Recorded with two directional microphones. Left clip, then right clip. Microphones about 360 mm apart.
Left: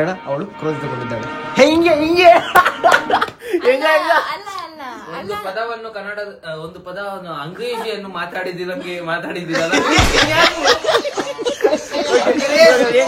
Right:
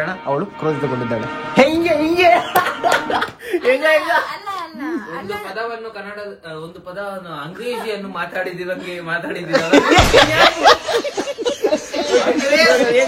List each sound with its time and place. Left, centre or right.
0.1 s speech: centre
7.6 s speech: centre